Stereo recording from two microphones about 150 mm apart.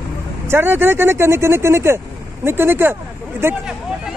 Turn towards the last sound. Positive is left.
turn(degrees=-15)  # may be behind; listen again after turning